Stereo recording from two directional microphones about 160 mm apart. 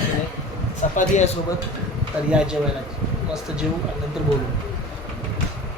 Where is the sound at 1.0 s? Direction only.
45° left (ahead or behind).